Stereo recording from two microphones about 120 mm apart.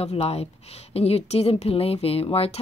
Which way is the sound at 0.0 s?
55° left (ahead or behind).